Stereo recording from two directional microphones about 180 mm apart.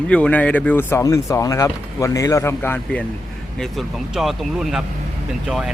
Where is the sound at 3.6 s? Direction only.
Centre (ahead or behind).